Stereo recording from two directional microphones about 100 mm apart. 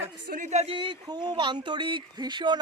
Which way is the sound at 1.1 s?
50° right (ahead or behind).